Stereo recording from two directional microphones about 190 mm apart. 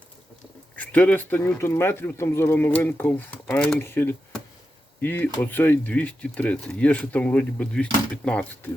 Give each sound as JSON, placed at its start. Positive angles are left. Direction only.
{"t": 0.8, "sound": "speech", "side_deg": 5}